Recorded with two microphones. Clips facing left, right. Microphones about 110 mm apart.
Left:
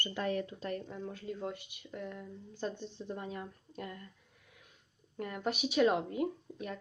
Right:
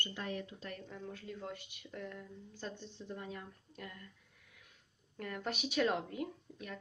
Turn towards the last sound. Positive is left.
turn(degrees=30)  # may be behind; listen again after turning